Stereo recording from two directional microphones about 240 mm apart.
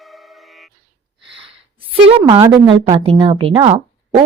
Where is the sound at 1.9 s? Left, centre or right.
Right.